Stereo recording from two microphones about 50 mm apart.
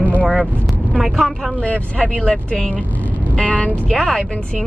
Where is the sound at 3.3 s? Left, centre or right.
Left.